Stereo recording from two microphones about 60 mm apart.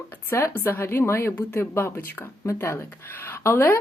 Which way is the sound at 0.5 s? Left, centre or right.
Left.